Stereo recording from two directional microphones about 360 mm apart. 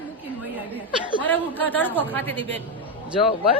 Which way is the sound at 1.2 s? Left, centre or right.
Centre.